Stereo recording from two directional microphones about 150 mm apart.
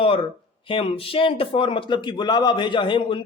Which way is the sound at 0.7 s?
35° left (ahead or behind).